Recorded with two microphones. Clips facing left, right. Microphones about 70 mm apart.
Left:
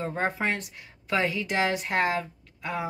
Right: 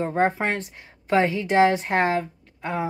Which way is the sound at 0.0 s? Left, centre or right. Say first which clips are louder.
Right 6 dB; right.